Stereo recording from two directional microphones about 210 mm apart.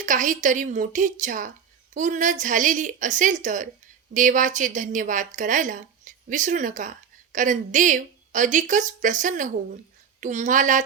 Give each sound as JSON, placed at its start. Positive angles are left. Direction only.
{"t": 0.0, "sound": "a woman's voice", "side_deg": -40}